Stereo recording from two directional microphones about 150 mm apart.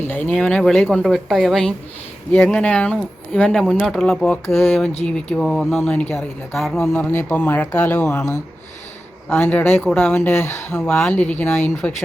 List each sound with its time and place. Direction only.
0.3 s speech: 10° left (ahead or behind)
9.3 s speech: 10° left (ahead or behind)
10.2 s speech: 15° left (ahead or behind)